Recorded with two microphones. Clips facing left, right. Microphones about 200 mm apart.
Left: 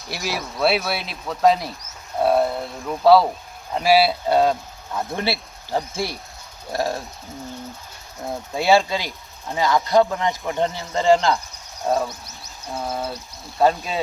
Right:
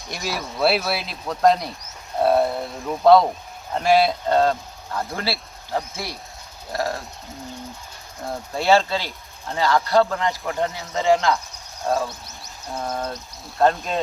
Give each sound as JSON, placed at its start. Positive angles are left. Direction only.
{"t": 0.1, "sound": "speech", "side_deg": 0}
{"t": 6.0, "sound": "speech", "side_deg": 0}
{"t": 8.5, "sound": "speech", "side_deg": 15}
{"t": 10.7, "sound": "speech", "side_deg": 0}